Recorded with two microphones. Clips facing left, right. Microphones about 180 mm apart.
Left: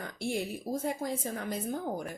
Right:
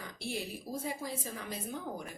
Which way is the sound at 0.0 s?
50° left (ahead or behind).